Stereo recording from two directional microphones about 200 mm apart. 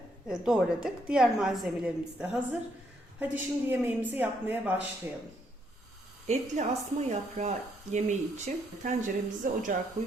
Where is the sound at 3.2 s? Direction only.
10° right (ahead or behind).